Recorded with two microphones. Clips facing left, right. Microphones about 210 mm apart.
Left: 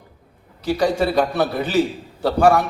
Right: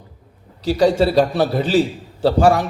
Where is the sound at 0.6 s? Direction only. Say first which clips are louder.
Right 4 dB; 35° right (ahead or behind).